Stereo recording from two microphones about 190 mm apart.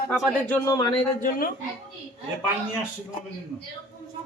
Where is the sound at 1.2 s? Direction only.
50° left (ahead or behind).